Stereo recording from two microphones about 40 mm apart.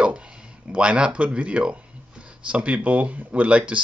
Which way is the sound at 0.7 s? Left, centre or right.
Right.